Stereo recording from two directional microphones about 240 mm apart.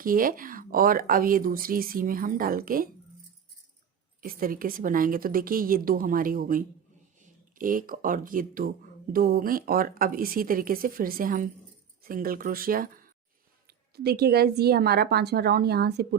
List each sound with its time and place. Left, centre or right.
0.0 s speech: right
4.2 s speech: right